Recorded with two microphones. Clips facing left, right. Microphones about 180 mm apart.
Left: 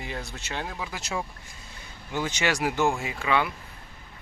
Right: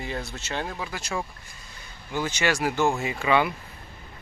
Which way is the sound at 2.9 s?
Centre (ahead or behind).